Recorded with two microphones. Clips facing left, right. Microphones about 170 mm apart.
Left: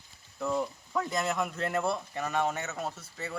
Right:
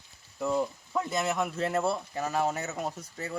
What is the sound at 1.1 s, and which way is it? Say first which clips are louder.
Speech: right 3 dB; 5° right (ahead or behind).